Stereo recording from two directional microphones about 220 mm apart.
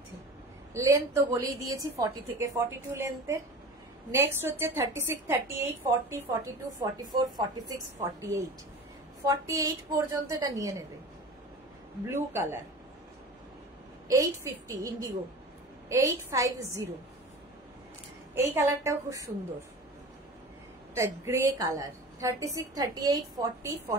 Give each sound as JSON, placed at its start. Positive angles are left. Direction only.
{"t": 0.7, "sound": "a woman's voice", "side_deg": -15}
{"t": 12.1, "sound": "a woman's voice", "side_deg": -10}
{"t": 14.0, "sound": "a woman's voice", "side_deg": -15}
{"t": 18.3, "sound": "a woman's voice", "side_deg": -10}
{"t": 20.9, "sound": "a woman's voice", "side_deg": -10}